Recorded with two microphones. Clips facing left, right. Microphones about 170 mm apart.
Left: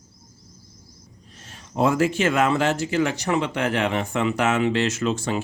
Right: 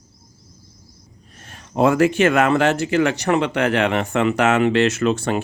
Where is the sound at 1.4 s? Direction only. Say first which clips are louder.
Right 4 dB; 60° right (ahead or behind).